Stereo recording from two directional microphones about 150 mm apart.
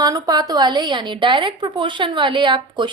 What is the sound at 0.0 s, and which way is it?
A woman's voice, 25° right (ahead or behind).